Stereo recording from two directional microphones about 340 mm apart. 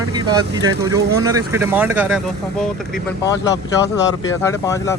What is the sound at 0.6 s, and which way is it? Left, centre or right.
Speech, centre.